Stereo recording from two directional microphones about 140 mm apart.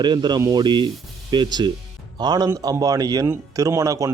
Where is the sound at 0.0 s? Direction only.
30° right (ahead or behind).